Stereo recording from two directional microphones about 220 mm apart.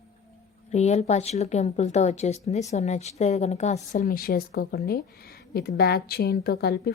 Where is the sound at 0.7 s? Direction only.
30° left (ahead or behind).